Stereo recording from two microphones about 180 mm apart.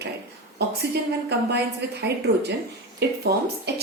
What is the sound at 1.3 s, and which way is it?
A woman's voice, 65° right (ahead or behind).